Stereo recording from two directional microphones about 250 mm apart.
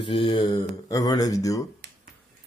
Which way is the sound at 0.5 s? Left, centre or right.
Centre.